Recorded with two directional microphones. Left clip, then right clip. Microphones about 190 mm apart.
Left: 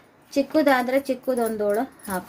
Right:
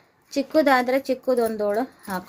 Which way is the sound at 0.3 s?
40° right (ahead or behind).